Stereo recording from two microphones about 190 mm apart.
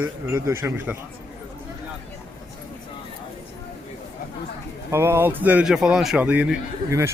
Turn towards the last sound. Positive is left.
turn(degrees=-10)  # may be behind; listen again after turning